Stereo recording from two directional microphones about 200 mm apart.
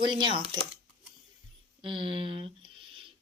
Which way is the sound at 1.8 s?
25° right (ahead or behind).